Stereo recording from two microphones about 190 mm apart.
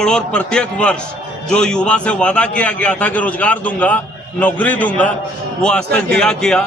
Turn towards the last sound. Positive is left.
turn(degrees=5)  # may be behind; listen again after turning